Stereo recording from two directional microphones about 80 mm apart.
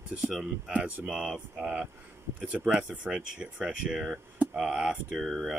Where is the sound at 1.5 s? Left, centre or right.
Centre.